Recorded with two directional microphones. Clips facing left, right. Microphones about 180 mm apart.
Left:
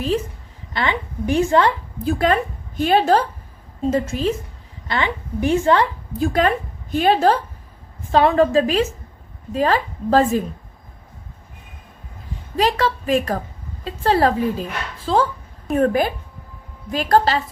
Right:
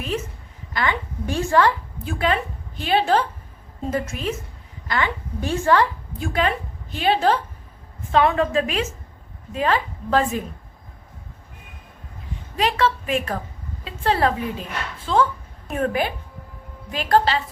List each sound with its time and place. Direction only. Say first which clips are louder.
0.7 s a woman's voice: left 1 dB; 25° left (ahead or behind)
2.0 s a woman's voice: left 5 dB; 45° left (ahead or behind)
3.8 s a woman's voice: left 6 dB; 30° left (ahead or behind)
4.9 s a woman's voice: left 2 dB; 20° left (ahead or behind)
6.1 s a woman's voice: left 5 dB; 40° left (ahead or behind)
12.5 s a woman's voice: left 2 dB; 35° left (ahead or behind)